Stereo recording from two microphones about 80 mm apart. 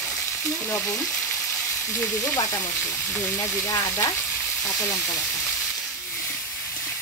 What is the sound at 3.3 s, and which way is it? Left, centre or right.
Speech, left.